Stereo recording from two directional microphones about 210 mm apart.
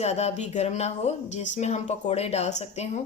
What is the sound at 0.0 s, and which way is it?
Speech, 30° left (ahead or behind).